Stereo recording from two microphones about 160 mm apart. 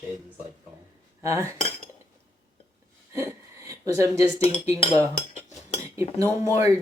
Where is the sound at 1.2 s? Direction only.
15° right (ahead or behind).